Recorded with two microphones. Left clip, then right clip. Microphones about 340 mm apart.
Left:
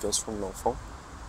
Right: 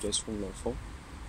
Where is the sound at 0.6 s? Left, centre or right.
Left.